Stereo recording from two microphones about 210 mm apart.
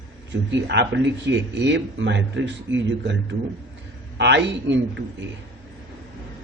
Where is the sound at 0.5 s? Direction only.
55° right (ahead or behind).